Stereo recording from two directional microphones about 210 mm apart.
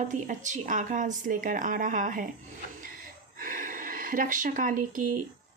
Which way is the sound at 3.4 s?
40° right (ahead or behind).